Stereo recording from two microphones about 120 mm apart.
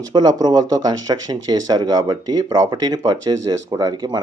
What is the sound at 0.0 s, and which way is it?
Speech, 35° right (ahead or behind).